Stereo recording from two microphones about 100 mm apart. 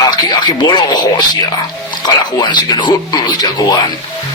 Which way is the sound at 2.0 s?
45° left (ahead or behind).